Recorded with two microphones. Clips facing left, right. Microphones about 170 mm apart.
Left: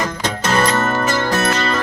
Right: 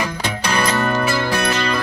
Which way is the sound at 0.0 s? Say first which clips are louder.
Left 2 dB; 45° left (ahead or behind).